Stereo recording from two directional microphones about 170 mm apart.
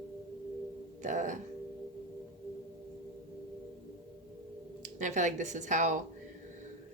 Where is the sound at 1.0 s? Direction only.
45° right (ahead or behind).